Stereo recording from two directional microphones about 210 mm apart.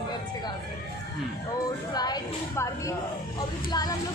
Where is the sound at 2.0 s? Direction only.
20° left (ahead or behind).